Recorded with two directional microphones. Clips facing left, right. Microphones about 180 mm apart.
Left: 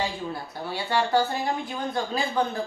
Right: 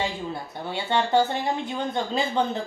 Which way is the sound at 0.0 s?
20° right (ahead or behind).